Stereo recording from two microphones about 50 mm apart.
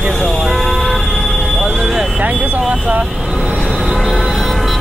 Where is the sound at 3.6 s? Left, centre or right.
Centre.